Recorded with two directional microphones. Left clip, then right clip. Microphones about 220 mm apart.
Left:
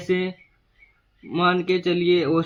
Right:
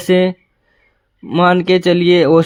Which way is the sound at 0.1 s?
45° right (ahead or behind).